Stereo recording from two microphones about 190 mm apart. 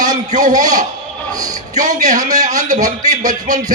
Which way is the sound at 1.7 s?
40° right (ahead or behind).